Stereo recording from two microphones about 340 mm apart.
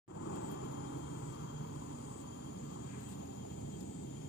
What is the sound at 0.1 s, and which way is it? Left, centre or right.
Vehicle, left.